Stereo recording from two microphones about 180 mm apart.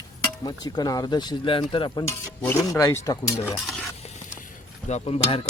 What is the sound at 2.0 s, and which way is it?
Stir, 15° left (ahead or behind).